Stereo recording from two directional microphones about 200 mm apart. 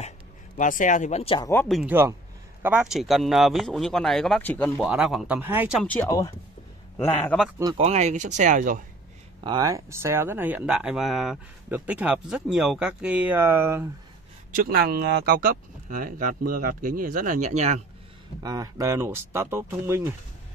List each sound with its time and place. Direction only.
0.6 s speech: 40° left (ahead or behind)
1.4 s a man's voice: 10° left (ahead or behind)
1.8 s speech: 10° right (ahead or behind); by 4.8 s 5° left (ahead or behind)
4.8 s speech: 5° right (ahead or behind)
5.9 s a man's voice: 10° left (ahead or behind)
7.7 s speech: 30° right (ahead or behind)
9.4 s speech: 20° right (ahead or behind)
14.5 s speech: 50° right (ahead or behind)
18.4 s speech: 20° right (ahead or behind)